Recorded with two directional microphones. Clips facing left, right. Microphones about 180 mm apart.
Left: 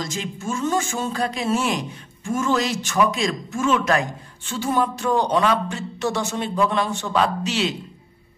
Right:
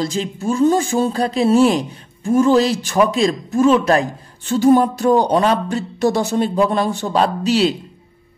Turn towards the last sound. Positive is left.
turn(degrees=-35)  # may be behind; listen again after turning